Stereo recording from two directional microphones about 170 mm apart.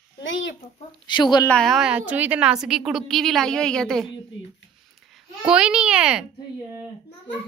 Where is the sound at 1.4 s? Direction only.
5° left (ahead or behind).